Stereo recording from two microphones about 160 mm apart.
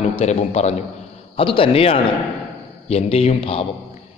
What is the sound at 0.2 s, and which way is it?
Speech, 45° left (ahead or behind).